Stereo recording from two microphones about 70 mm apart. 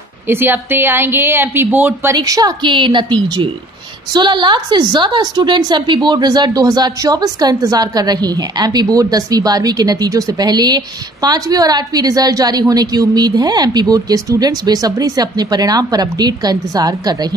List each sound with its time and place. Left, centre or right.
0.3 s a woman's voice: right
2.1 s a woman's voice: right
3.0 s a woman's voice: right